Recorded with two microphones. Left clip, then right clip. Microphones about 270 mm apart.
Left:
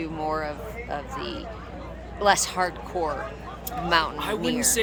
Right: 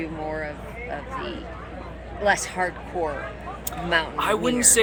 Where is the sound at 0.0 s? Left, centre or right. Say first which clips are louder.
Left 2 dB; centre.